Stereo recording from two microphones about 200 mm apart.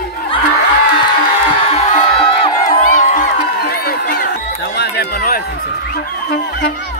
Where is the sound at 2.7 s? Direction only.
40° left (ahead or behind).